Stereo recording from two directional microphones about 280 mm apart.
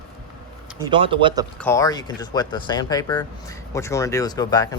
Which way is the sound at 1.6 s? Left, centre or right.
Centre.